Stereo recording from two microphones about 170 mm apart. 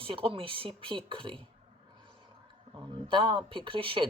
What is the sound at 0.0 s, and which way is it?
Speech, 30° right (ahead or behind).